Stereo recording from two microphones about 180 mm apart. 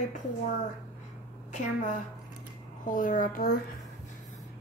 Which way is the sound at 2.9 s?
45° left (ahead or behind).